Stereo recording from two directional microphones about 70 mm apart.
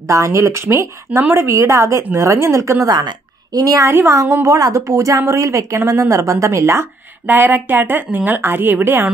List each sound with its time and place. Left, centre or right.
0.1 s a woman's voice: right
7.2 s a woman's voice: right